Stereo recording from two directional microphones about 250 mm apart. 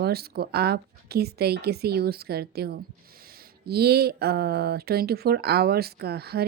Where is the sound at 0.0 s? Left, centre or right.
Right.